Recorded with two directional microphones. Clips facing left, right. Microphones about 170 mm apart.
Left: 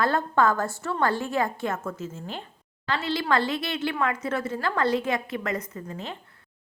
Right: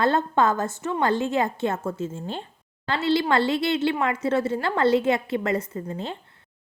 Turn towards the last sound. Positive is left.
turn(degrees=-30)  # may be behind; listen again after turning